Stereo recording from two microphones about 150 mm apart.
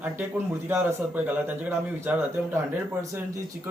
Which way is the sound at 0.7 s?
15° right (ahead or behind).